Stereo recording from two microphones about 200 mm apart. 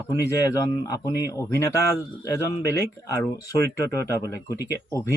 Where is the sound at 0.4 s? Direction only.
15° left (ahead or behind).